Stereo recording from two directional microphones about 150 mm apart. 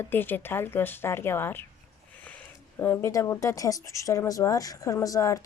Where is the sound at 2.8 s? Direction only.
15° left (ahead or behind).